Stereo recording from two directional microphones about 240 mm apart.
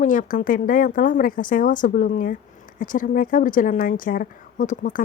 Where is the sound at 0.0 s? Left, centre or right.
Left.